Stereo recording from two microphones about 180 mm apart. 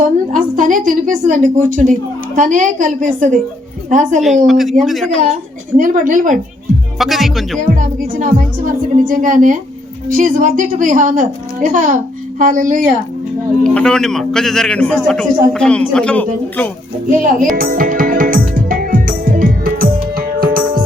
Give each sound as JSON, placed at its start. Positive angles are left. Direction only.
{"t": 0.3, "sound": "a woman's voice", "side_deg": -45}
{"t": 4.4, "sound": "a man's voice", "side_deg": 0}
{"t": 5.2, "sound": "a woman's voice", "side_deg": -45}
{"t": 7.0, "sound": "a man's voice", "side_deg": 0}
{"t": 7.6, "sound": "a woman's voice", "side_deg": -45}
{"t": 13.7, "sound": "a man's voice", "side_deg": 5}
{"t": 17.5, "sound": "music", "side_deg": -50}